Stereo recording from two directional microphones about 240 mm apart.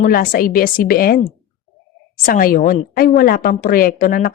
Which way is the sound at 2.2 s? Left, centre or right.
Left.